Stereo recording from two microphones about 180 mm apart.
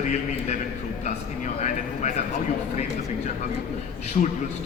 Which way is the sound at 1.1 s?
45° left (ahead or behind).